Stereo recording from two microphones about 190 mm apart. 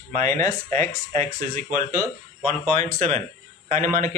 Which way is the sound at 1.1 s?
40° right (ahead or behind).